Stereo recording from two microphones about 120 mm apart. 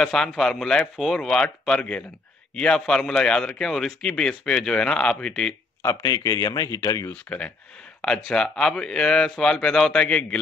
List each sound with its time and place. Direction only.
0.0 s speech: 5° left (ahead or behind)
5.8 s speech: 25° left (ahead or behind)
7.1 s speech: 10° left (ahead or behind)